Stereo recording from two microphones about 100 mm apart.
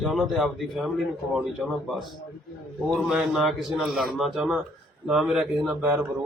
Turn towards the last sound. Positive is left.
turn(degrees=-5)  # may be behind; listen again after turning